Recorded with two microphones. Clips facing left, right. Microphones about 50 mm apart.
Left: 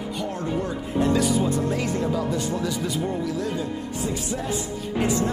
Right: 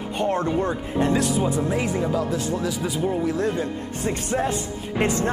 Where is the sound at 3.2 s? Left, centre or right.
Right.